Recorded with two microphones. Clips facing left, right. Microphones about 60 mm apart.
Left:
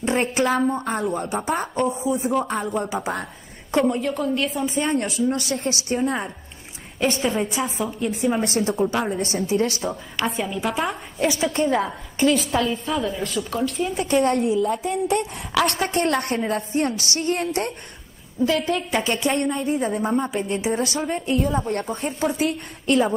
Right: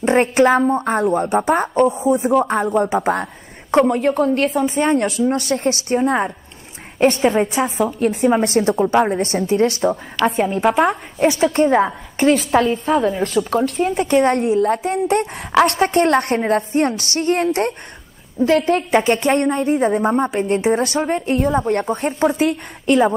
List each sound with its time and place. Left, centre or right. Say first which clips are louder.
0.0 s a sound: right 7 dB; right
0.3 s a woman's voice: right 8 dB; right
0.6 s speech: right 5 dB; right
0.9 s a woman's voice: right 8 dB; right
2.6 s a woman's voice: right 8 dB; right
13.9 s a woman's voice: right 4 dB; right
21.4 s a woman's voice: right 5 dB; right